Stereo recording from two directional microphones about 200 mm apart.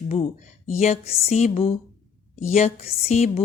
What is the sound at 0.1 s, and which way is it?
A woman's voice, 35° left (ahead or behind).